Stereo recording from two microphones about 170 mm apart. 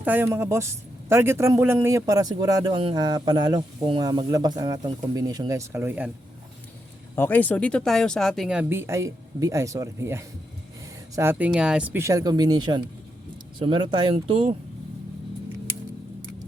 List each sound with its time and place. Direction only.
0.0 s speech: 10° right (ahead or behind)
7.2 s speech: 10° left (ahead or behind); by 14.4 s 30° right (ahead or behind)